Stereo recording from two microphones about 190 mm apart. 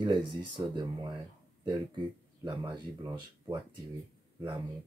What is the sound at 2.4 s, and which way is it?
Speech, 25° right (ahead or behind).